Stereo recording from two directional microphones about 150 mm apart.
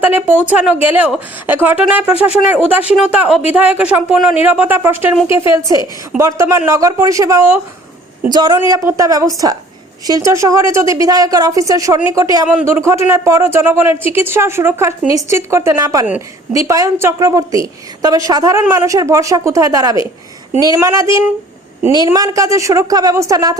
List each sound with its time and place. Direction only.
0.0 s a woman's voice: 10° right (ahead or behind)
8.3 s a woman's voice: 30° right (ahead or behind)